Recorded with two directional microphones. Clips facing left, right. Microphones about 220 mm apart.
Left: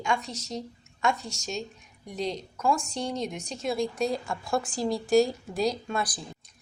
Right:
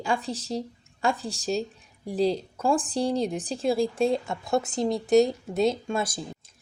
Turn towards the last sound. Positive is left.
turn(degrees=-25)  # may be behind; listen again after turning